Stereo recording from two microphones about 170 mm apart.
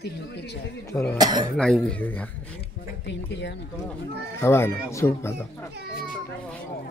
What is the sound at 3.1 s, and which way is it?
Speech, 90° left.